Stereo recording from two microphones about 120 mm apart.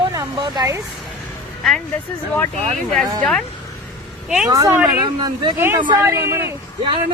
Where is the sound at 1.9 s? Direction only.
15° left (ahead or behind).